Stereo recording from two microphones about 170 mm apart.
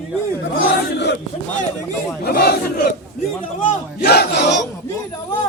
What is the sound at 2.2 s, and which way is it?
Speech, 70° left (ahead or behind).